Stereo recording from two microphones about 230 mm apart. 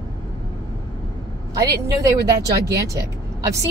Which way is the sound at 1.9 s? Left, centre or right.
Centre.